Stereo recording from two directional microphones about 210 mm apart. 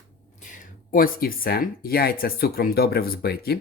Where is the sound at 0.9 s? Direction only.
45° left (ahead or behind).